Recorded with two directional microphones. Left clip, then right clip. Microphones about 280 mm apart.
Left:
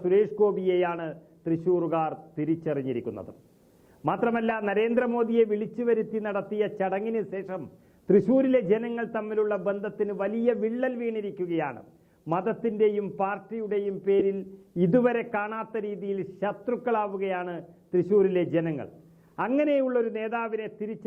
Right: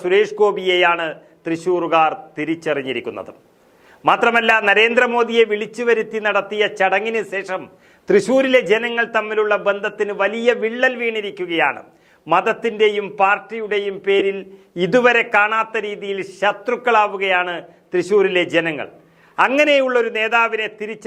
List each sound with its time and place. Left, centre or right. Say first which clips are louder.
0.0 s a man's voice: right 8 dB; centre